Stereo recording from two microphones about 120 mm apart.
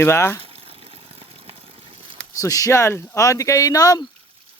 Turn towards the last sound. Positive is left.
turn(degrees=30)  # may be behind; listen again after turning